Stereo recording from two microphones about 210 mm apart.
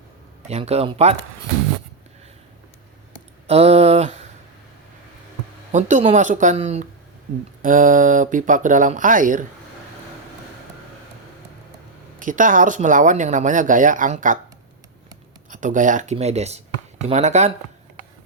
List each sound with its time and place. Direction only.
0.4 s speech: 30° right (ahead or behind)
3.4 s a sound: 30° right (ahead or behind)
5.7 s speech: 35° right (ahead or behind)
12.2 s speech: 40° right (ahead or behind)
15.4 s speech: 40° right (ahead or behind)